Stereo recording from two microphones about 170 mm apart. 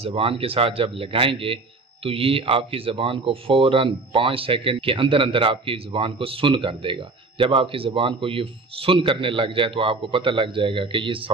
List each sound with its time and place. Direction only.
0.0 s speech: 35° right (ahead or behind)